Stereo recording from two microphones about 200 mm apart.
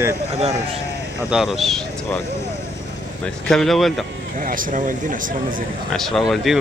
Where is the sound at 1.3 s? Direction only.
Centre (ahead or behind).